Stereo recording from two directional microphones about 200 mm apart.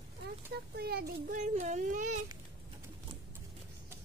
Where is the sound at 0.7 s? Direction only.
50° right (ahead or behind).